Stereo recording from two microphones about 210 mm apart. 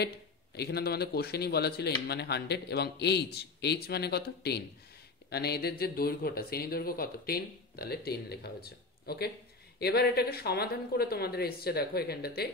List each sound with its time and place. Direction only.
0.6 s speech: 50° left (ahead or behind)